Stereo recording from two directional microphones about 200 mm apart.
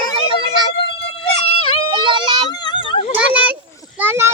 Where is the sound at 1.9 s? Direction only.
25° right (ahead or behind).